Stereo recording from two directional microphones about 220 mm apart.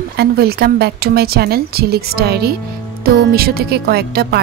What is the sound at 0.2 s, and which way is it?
Speech, 45° right (ahead or behind).